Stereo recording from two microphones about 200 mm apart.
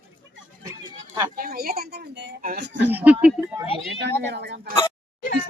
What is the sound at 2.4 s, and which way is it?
Speech, 45° right (ahead or behind).